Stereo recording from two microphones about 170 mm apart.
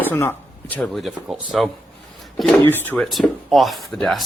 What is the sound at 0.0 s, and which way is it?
Speech, 10° left (ahead or behind).